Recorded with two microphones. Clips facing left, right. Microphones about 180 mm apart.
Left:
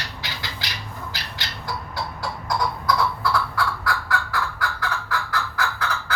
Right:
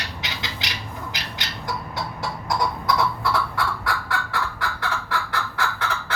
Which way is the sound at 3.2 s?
25° right (ahead or behind).